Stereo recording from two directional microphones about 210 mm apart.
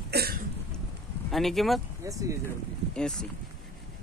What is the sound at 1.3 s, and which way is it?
Speech, centre (ahead or behind).